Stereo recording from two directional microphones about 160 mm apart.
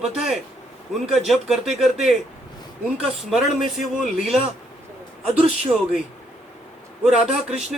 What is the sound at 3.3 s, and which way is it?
A man's voice, 5° right (ahead or behind).